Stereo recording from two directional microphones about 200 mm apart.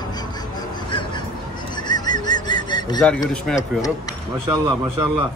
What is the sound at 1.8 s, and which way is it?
Bird, 20° left (ahead or behind).